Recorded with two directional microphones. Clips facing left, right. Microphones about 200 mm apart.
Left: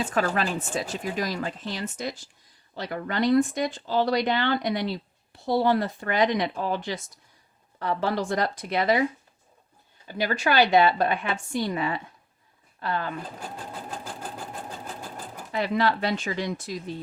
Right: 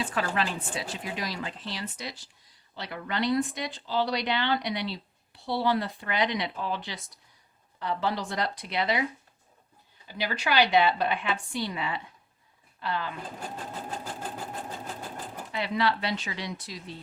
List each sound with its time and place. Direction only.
0.0 s speech: 45° left (ahead or behind)
10.1 s speech: 45° left (ahead or behind)
15.5 s speech: 45° left (ahead or behind)